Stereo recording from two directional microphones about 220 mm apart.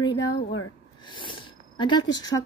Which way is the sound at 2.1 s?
20° left (ahead or behind).